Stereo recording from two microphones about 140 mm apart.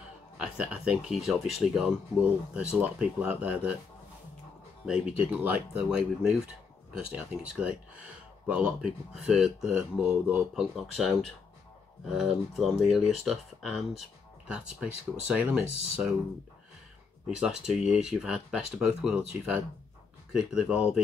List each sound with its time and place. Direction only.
0.4 s speech: 10° right (ahead or behind)
4.8 s speech: 5° right (ahead or behind)
17.6 s speech: 5° right (ahead or behind)